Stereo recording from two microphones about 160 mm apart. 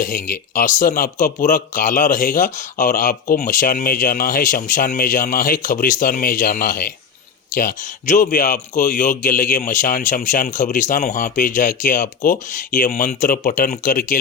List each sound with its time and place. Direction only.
0.0 s speech: 60° left (ahead or behind)